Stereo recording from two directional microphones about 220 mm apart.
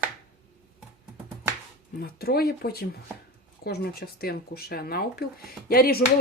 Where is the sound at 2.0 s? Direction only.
45° left (ahead or behind).